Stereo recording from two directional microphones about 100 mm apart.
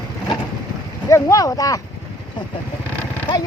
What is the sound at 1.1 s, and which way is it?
Speech, 35° left (ahead or behind).